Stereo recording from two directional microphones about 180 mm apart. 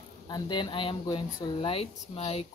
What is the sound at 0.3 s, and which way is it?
Speech, 25° left (ahead or behind).